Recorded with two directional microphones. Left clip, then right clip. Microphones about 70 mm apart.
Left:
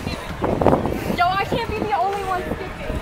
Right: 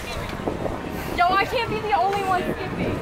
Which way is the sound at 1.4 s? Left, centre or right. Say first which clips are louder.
Even; right.